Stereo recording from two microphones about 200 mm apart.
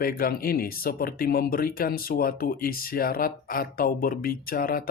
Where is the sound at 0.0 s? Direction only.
45° left (ahead or behind).